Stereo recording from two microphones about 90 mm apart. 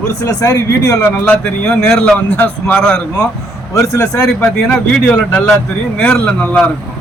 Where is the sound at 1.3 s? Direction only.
15° left (ahead or behind).